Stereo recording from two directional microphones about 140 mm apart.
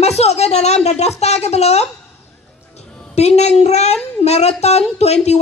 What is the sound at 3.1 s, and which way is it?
A woman's voice, 50° left (ahead or behind).